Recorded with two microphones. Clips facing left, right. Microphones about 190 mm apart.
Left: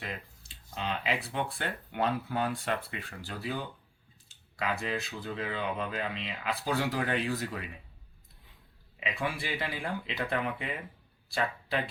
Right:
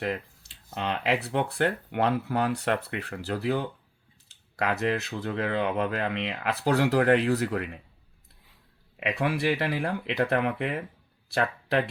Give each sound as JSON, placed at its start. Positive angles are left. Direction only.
{"t": 0.0, "sound": "speech", "side_deg": -60}
{"t": 9.0, "sound": "speech", "side_deg": -65}